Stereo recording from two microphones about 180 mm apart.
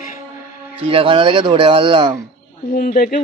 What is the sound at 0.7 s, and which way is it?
Speech, 30° right (ahead or behind).